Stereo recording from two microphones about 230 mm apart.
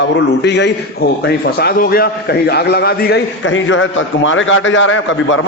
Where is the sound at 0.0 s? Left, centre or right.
Left.